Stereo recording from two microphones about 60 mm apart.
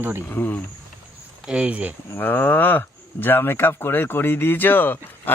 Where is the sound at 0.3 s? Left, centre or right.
Left.